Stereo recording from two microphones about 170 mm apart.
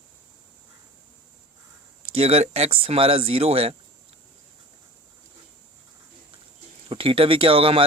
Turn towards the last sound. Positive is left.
turn(degrees=-35)  # may be behind; listen again after turning